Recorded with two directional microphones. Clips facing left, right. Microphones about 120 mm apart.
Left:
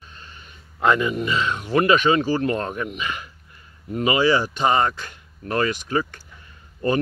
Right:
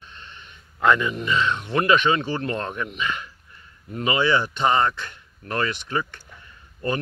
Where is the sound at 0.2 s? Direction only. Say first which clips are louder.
Even; 5° left (ahead or behind).